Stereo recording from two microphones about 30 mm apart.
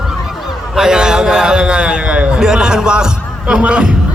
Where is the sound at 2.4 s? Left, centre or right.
Right.